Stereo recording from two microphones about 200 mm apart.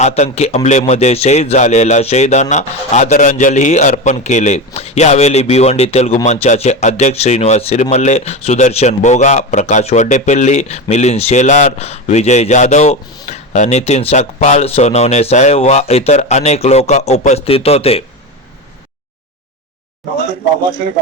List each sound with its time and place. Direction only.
0.0 s speech: 30° left (ahead or behind)